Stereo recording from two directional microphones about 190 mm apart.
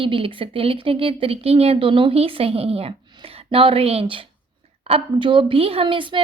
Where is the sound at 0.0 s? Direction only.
25° right (ahead or behind).